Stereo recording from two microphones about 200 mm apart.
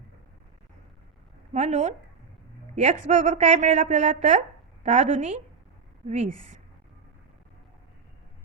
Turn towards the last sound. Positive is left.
turn(degrees=-35)  # may be behind; listen again after turning